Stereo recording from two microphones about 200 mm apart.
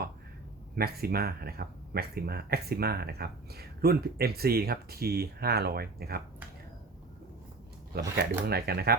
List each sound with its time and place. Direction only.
0.8 s speech: 50° right (ahead or behind)
7.9 s speech: 50° right (ahead or behind)